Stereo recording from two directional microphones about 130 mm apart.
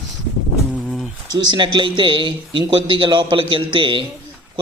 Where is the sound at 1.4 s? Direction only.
35° right (ahead or behind).